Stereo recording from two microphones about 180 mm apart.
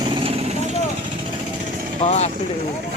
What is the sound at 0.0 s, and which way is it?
Vehicle, 30° right (ahead or behind).